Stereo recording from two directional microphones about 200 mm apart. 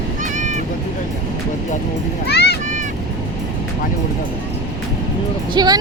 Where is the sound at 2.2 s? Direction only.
55° left (ahead or behind).